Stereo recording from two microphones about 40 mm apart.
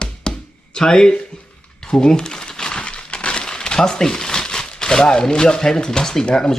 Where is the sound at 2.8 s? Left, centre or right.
Left.